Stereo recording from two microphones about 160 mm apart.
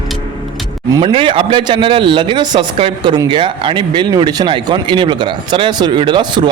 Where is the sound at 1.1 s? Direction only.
35° right (ahead or behind).